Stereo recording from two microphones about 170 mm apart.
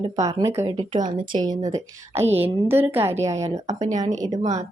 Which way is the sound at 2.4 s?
15° right (ahead or behind).